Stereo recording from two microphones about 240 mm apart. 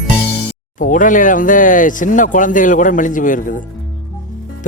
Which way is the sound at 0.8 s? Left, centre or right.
Left.